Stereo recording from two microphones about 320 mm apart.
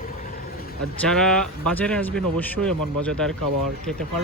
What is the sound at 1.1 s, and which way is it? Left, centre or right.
Speech, centre.